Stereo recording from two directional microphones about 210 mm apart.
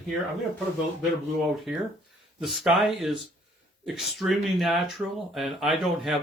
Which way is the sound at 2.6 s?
Centre (ahead or behind).